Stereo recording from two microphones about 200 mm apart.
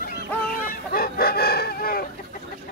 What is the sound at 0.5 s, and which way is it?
Chicken, 45° left (ahead or behind).